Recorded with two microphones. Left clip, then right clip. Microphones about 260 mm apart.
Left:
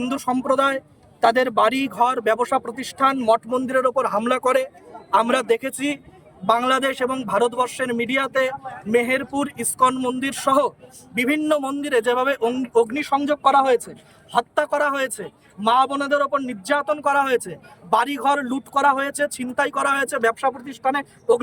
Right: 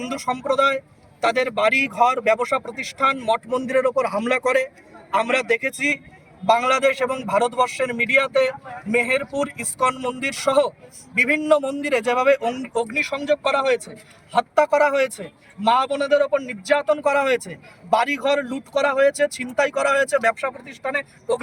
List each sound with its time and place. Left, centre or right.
0.0 s a man's voice: centre
1.5 s a man's voice: centre